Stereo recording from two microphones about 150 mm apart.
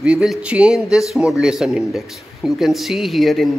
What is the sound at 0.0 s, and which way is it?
A man's voice, 5° right (ahead or behind).